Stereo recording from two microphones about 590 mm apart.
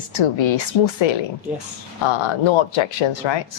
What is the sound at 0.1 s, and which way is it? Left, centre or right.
Speech, left.